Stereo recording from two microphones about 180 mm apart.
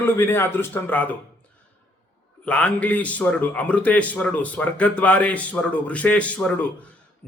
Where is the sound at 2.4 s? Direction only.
5° left (ahead or behind).